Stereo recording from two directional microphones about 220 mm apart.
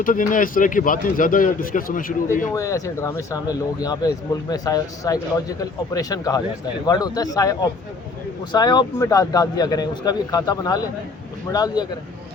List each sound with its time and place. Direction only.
0.0 s a man's voice: 40° left (ahead or behind)
2.6 s speech: 15° left (ahead or behind)